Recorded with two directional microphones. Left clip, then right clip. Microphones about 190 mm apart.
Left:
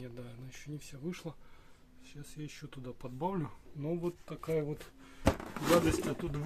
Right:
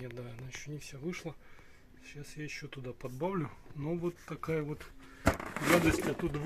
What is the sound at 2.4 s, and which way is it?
Speech, 5° right (ahead or behind).